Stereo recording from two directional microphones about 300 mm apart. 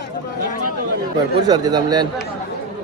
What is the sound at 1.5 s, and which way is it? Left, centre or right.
Speech, centre.